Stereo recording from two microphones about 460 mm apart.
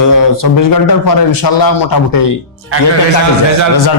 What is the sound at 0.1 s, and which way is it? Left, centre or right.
A man's voice, left.